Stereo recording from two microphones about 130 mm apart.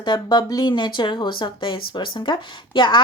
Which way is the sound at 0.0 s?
35° left (ahead or behind).